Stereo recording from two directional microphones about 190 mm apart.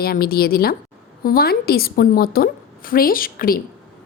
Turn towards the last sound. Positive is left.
turn(degrees=50)  # may be behind; listen again after turning